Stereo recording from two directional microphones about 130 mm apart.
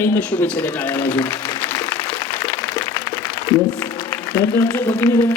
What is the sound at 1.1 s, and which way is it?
Speech, 30° left (ahead or behind).